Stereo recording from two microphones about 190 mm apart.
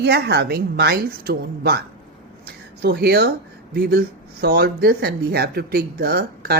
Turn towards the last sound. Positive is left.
turn(degrees=-55)  # may be behind; listen again after turning